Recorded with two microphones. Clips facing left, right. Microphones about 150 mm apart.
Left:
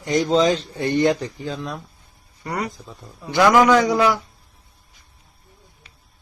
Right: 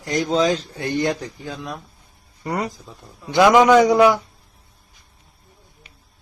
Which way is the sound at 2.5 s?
25° right (ahead or behind).